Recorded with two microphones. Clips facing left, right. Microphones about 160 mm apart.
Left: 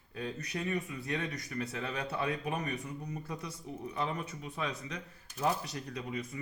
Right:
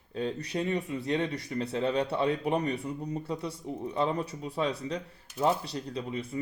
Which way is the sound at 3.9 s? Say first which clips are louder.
Right 7 dB; 30° right (ahead or behind).